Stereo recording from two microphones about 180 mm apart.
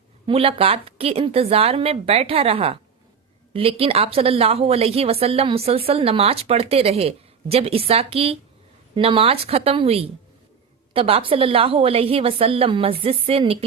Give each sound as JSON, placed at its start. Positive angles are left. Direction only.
{"t": 0.3, "sound": "a woman's voice", "side_deg": -30}